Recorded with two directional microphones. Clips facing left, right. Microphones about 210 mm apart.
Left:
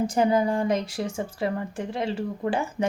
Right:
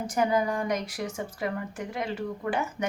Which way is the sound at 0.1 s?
25° left (ahead or behind).